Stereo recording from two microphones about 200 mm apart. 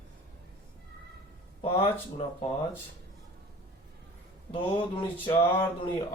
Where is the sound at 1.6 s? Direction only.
30° left (ahead or behind).